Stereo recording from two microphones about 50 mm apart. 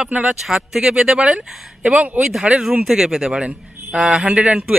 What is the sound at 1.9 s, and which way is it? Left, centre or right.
Speech, right.